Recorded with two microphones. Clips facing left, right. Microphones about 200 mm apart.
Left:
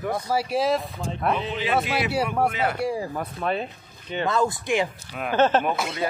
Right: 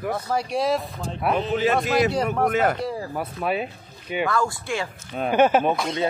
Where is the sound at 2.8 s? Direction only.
15° left (ahead or behind).